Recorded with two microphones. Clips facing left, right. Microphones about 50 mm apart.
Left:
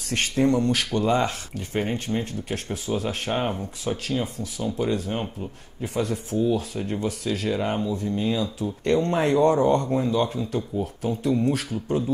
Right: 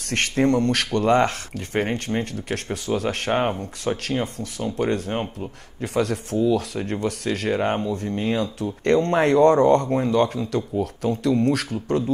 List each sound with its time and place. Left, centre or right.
0.1 s speech: right
5.8 s speech: right
9.8 s speech: right
10.1 s speech: right
11.3 s speech: right